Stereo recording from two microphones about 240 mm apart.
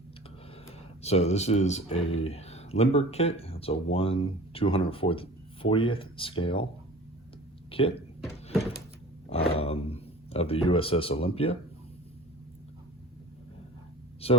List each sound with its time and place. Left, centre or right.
0.5 s speech: left
7.7 s speech: left
9.6 s speech: left
14.2 s speech: left